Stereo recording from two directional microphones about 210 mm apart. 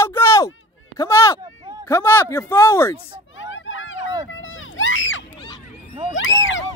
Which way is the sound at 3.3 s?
65° left (ahead or behind).